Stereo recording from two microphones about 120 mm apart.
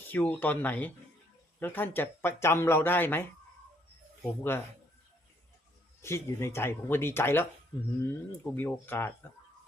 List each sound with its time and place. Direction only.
0.1 s speech: 15° left (ahead or behind)
6.0 s speech: 20° left (ahead or behind)
8.5 s speech: 15° left (ahead or behind)